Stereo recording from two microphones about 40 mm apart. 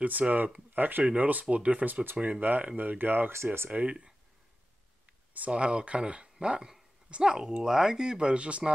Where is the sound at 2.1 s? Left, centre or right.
Right.